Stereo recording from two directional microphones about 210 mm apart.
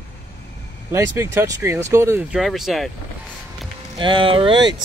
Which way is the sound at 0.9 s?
10° right (ahead or behind).